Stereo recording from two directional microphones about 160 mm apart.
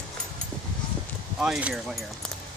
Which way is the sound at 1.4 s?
5° right (ahead or behind).